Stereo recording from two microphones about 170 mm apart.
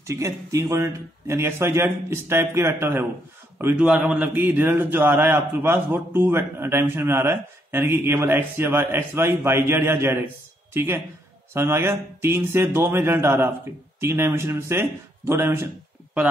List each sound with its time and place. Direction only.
0.0 s a man's voice: 20° right (ahead or behind)